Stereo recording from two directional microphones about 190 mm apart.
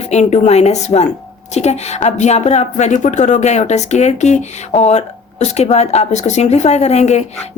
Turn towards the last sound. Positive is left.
turn(degrees=35)  # may be behind; listen again after turning